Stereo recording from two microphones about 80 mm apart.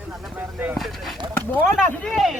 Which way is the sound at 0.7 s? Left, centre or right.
Centre.